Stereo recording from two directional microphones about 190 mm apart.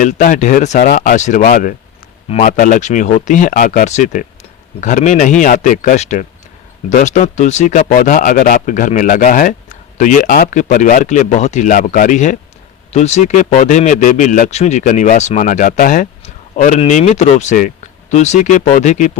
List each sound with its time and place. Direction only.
0.0 s speech: 45° left (ahead or behind)